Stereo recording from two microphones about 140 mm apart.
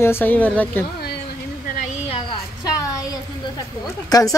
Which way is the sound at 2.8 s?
25° left (ahead or behind).